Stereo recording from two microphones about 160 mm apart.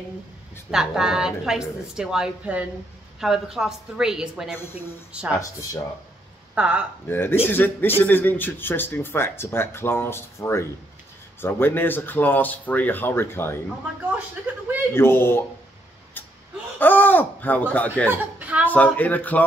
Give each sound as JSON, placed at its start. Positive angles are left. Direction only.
{"t": 0.7, "sound": "a woman's voice", "side_deg": -5}
{"t": 5.3, "sound": "speech", "side_deg": 20}
{"t": 6.5, "sound": "speech", "side_deg": -10}
{"t": 7.1, "sound": "speech", "side_deg": 15}
{"t": 14.5, "sound": "speech", "side_deg": -10}
{"t": 15.0, "sound": "speech", "side_deg": 15}
{"t": 16.7, "sound": "speech", "side_deg": 10}
{"t": 18.1, "sound": "a woman's voice", "side_deg": -10}
{"t": 18.7, "sound": "speech", "side_deg": 10}